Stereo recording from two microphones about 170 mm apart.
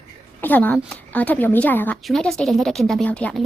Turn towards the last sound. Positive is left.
turn(degrees=5)  # may be behind; listen again after turning